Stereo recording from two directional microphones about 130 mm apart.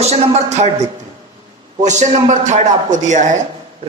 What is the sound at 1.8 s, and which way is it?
A man's voice, 65° right (ahead or behind).